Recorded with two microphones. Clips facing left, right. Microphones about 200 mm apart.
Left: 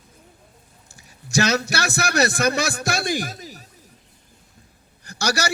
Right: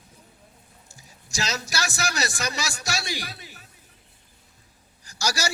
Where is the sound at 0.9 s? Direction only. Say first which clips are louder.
Left 9 dB; 65° left (ahead or behind); by 3.7 s 40° left (ahead or behind).